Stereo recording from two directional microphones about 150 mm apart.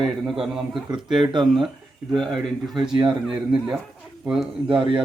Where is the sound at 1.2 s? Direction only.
30° right (ahead or behind).